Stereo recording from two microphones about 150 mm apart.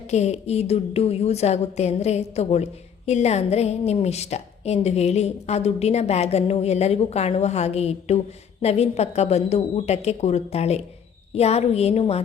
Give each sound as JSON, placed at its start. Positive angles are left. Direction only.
{"t": 0.1, "sound": "a woman's voice", "side_deg": 45}